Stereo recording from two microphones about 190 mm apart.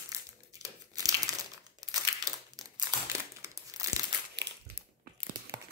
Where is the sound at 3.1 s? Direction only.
15° right (ahead or behind).